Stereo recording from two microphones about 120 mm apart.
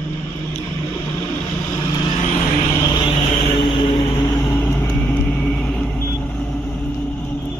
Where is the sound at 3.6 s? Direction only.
40° left (ahead or behind).